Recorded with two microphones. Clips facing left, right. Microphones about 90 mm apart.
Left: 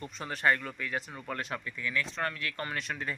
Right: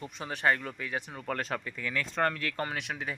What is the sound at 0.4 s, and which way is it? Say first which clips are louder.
Speech: even; 30° right (ahead or behind).